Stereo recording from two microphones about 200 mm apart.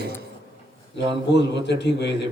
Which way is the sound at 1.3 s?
60° left (ahead or behind).